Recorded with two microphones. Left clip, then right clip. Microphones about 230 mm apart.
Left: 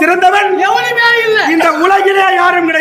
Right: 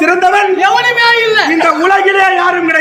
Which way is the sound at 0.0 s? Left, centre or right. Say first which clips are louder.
Even; centre.